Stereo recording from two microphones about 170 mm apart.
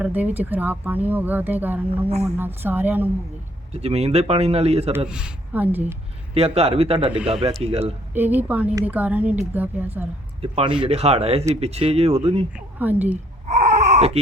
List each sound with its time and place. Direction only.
0.0 s speech: 10° right (ahead or behind)
2.0 s speech: 40° right (ahead or behind)
2.4 s speech: 10° right (ahead or behind)
3.7 s speech: 40° right (ahead or behind)
5.0 s speech: 5° right (ahead or behind)
6.3 s speech: 35° right (ahead or behind)
8.1 s speech: 10° right (ahead or behind)
10.4 s speech: 35° right (ahead or behind)
12.5 s speech: 10° right (ahead or behind)
13.5 s baby cry: 40° right (ahead or behind)